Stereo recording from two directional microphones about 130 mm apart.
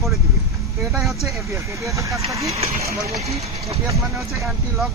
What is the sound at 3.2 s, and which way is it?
Speech, 55° right (ahead or behind).